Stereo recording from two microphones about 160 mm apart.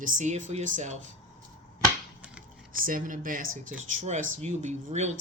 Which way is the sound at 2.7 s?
60° right (ahead or behind).